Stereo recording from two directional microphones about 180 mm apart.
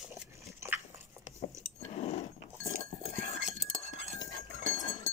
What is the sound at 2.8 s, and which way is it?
Chink, 40° left (ahead or behind).